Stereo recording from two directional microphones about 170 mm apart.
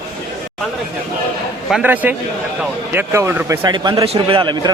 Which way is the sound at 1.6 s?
5° right (ahead or behind).